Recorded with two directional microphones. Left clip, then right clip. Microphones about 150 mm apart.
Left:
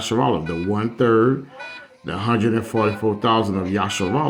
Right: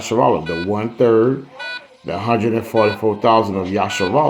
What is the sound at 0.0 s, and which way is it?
Speech, 45° left (ahead or behind).